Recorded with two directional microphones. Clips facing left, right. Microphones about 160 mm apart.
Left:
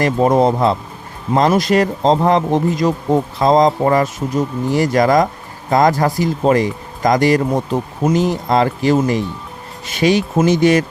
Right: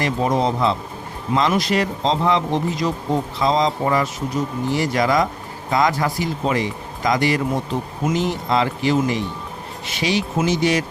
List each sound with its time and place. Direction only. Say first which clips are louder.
0.0 s speech: left 6 dB; 50° left (ahead or behind)